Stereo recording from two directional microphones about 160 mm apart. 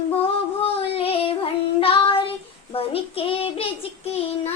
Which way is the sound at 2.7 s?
35° left (ahead or behind).